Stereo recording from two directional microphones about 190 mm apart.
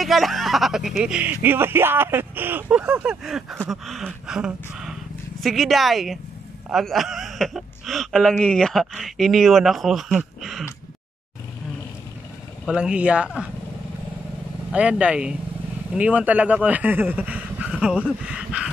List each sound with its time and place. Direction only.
0.0 s speech: centre (ahead or behind)
12.6 s speech: 5° right (ahead or behind)
14.7 s speech: 5° right (ahead or behind)